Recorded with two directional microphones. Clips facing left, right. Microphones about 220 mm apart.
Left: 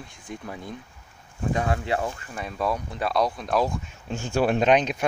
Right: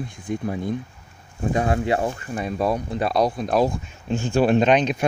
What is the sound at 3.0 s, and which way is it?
Speech, 40° right (ahead or behind).